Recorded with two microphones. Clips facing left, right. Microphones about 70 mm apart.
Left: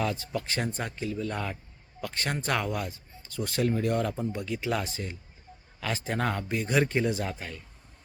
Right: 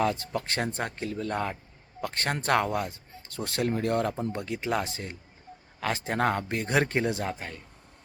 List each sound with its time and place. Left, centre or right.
0.0 s speech: right